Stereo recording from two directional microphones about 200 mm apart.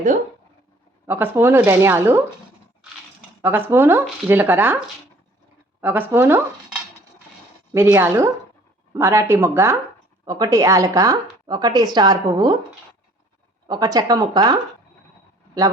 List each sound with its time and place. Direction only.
1.0 s speech: 10° right (ahead or behind)
3.4 s speech: 10° right (ahead or behind)
5.8 s speech: 10° right (ahead or behind)
7.7 s speech: 15° right (ahead or behind)
13.7 s speech: 20° right (ahead or behind)